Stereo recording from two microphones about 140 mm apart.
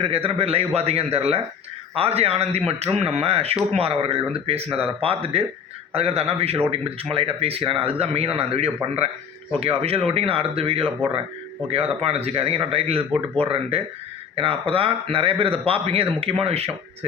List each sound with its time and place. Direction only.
0.0 s a man's voice: 40° right (ahead or behind)
12.0 s a man's voice: 45° right (ahead or behind)